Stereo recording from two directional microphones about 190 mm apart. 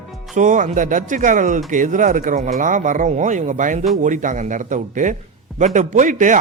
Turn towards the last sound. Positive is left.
turn(degrees=-40)  # may be behind; listen again after turning